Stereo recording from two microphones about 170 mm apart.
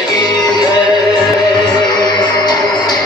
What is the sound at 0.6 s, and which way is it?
Music, 25° left (ahead or behind).